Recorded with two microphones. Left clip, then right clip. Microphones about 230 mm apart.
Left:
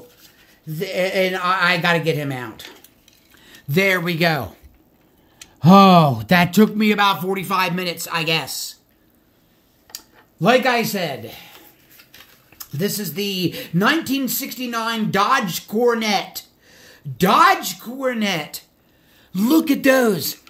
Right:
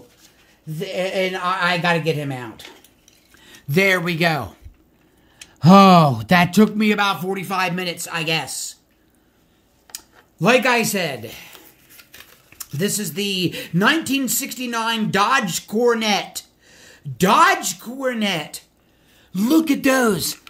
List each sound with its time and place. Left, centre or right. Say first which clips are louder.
0.2 s speech: left 2 dB; centre
3.3 s speech: right 1 dB; centre
9.9 s speech: even; centre
12.5 s speech: right 1 dB; centre